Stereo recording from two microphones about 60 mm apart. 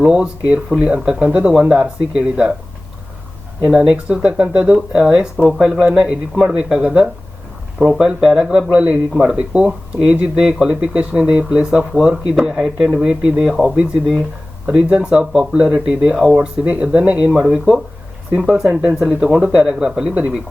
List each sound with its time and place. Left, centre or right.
0.0 s speech: centre
3.6 s speech: centre
7.9 s speech: centre
9.1 s speech: centre
15.2 s speech: centre
15.5 s speech: centre